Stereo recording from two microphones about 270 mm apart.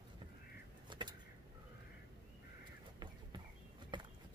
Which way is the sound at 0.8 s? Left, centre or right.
Centre.